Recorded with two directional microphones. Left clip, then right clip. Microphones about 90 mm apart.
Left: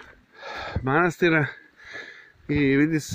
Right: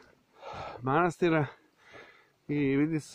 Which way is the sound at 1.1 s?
30° right (ahead or behind).